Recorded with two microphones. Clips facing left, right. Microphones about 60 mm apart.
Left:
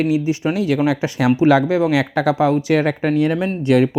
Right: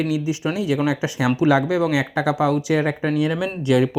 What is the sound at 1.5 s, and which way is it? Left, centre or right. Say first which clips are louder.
Speech: left 3 dB; left.